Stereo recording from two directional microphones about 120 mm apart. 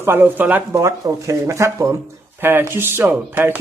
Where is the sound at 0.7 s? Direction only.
30° right (ahead or behind).